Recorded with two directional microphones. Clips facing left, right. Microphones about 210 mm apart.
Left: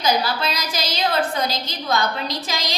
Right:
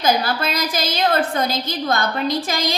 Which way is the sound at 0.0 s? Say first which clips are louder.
Right 2 dB; 50° right (ahead or behind).